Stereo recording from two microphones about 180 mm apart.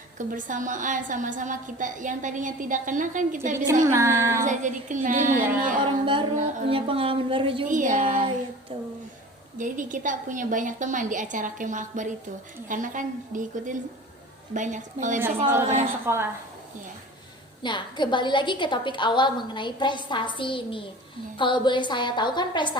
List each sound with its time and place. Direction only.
0.2 s a woman's voice: 45° right (ahead or behind)
3.8 s a woman's voice: 15° right (ahead or behind)
4.4 s a woman's voice: 45° right (ahead or behind)
6.7 s a woman's voice: 30° right (ahead or behind)
7.7 s a woman's voice: 45° right (ahead or behind)
8.7 s a woman's voice: 30° right (ahead or behind)
9.6 s a woman's voice: 45° right (ahead or behind)
15.4 s a woman's voice: 15° right (ahead or behind)
17.6 s a woman's voice: 25° left (ahead or behind)